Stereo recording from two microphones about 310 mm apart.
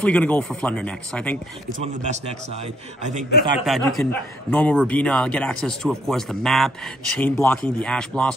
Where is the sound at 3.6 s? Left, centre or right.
Centre.